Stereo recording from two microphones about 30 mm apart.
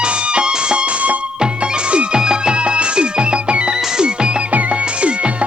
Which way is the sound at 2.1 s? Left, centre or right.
Right.